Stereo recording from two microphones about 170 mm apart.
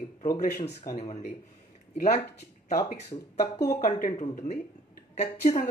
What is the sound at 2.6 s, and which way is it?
Speech, 45° left (ahead or behind).